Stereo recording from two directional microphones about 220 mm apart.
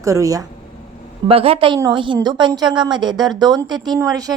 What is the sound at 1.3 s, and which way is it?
A woman's voice, 25° right (ahead or behind).